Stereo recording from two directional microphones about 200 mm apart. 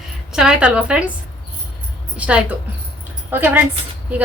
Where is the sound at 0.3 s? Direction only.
5° right (ahead or behind).